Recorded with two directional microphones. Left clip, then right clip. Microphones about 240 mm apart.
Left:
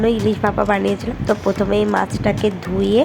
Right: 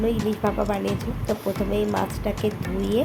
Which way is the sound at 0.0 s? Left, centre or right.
Centre.